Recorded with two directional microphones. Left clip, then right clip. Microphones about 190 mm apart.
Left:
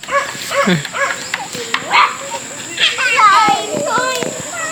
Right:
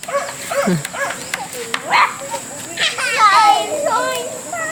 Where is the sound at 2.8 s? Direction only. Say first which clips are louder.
Left 4 dB; 15° right (ahead or behind).